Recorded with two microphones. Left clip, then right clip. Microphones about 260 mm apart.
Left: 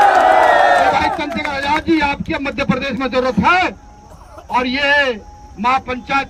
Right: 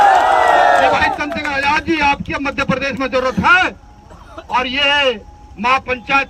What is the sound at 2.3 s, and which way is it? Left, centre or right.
A man's voice, centre.